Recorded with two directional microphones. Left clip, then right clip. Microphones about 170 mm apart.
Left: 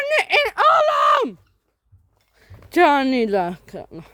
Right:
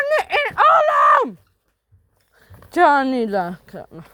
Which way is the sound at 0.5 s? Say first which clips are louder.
Right 4 dB; 25° left (ahead or behind).